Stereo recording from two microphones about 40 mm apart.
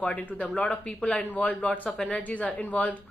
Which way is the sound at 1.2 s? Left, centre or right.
Left.